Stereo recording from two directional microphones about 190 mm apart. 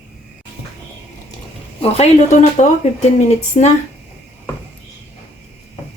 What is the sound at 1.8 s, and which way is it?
Speech, 35° left (ahead or behind).